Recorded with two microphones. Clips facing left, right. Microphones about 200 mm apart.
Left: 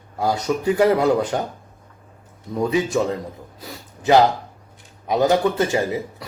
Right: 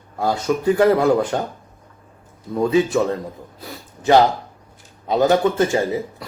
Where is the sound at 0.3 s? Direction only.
20° left (ahead or behind).